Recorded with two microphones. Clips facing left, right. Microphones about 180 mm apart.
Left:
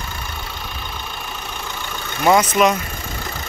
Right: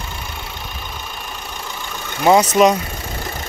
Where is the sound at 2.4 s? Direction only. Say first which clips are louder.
Right 3 dB; 35° right (ahead or behind).